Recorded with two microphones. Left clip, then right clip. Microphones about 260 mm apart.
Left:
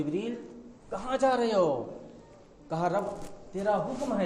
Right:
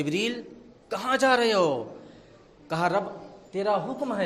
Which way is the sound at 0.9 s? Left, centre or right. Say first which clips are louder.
Right 4 dB; right.